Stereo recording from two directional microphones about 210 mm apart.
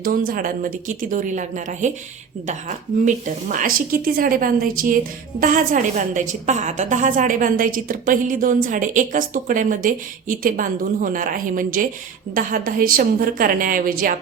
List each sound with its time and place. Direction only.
0.0 s speech: 45° right (ahead or behind)